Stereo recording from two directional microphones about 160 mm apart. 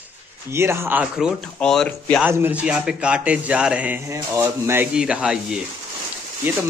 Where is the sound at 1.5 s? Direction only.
5° left (ahead or behind).